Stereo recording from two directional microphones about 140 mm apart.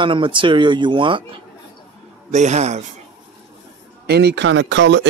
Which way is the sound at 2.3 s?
55° right (ahead or behind).